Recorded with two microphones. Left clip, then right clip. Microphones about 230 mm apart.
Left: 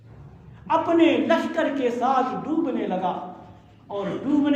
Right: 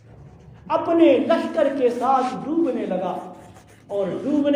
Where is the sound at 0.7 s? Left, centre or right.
Centre.